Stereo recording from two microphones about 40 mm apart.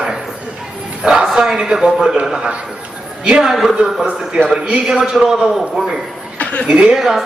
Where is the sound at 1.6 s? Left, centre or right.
Centre.